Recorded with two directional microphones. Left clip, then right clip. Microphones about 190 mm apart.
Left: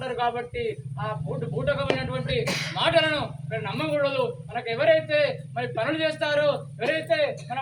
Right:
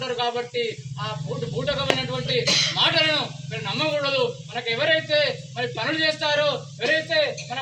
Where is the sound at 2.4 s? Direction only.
25° left (ahead or behind).